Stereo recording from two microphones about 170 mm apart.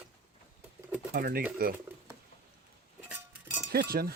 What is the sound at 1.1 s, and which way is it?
Speech, 65° right (ahead or behind).